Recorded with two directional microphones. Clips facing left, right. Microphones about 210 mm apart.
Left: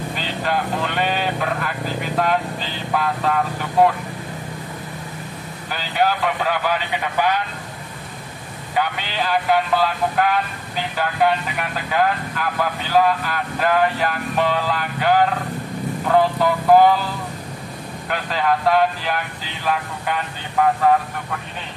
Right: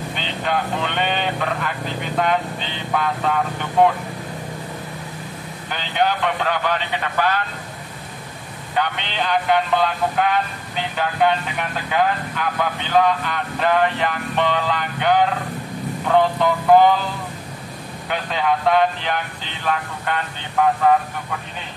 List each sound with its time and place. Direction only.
0.1 s speech: centre (ahead or behind)
5.7 s speech: 5° left (ahead or behind)
8.7 s speech: 5° left (ahead or behind)
18.0 s speech: centre (ahead or behind)